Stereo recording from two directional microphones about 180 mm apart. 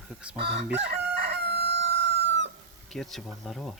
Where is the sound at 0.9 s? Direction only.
70° right (ahead or behind); by 2.5 s 90° right.